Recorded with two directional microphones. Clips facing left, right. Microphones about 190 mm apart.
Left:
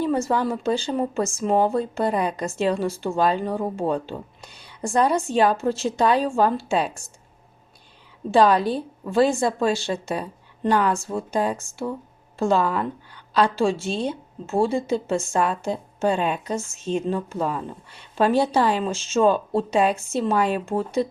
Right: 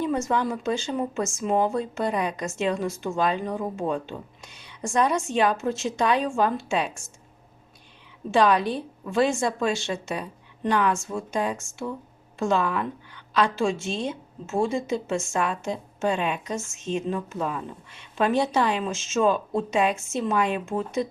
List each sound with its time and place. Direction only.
0.0 s a woman's voice: 35° left (ahead or behind)
8.3 s a woman's voice: 35° left (ahead or behind)